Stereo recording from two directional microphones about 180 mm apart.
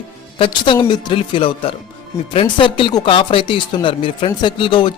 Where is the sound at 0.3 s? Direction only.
30° left (ahead or behind).